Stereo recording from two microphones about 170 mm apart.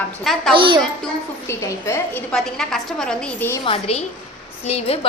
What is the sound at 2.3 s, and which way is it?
A woman's voice, 5° left (ahead or behind).